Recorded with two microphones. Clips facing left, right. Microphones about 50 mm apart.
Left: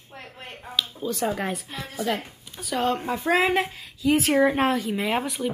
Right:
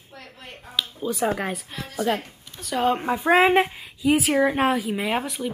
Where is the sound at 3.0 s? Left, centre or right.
Right.